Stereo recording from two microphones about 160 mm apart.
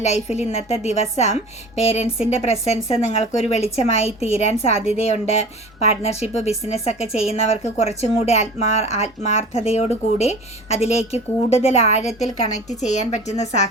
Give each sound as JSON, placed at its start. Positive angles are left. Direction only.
{"t": 0.0, "sound": "a woman's voice", "side_deg": 45}